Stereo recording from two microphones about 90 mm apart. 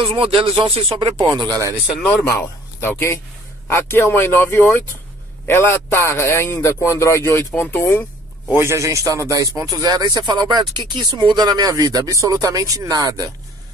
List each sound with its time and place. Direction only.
0.0 s speech: 80° right; by 1.7 s 45° right (ahead or behind)
2.2 s a man's voice: 30° left (ahead or behind)
7.8 s a sound: 20° left (ahead or behind)
8.5 s a man's voice: 35° right (ahead or behind)